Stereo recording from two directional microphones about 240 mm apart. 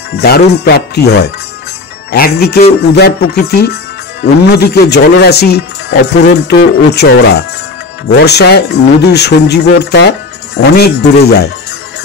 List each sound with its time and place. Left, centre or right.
0.2 s speech: left